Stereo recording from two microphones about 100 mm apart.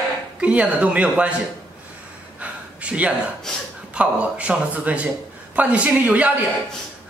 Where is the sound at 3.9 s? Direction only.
10° right (ahead or behind).